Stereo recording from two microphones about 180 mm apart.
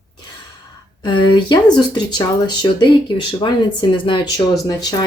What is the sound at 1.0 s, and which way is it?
Speech, 25° left (ahead or behind).